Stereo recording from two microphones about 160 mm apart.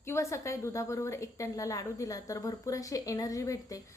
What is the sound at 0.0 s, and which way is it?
A woman's voice, 15° left (ahead or behind).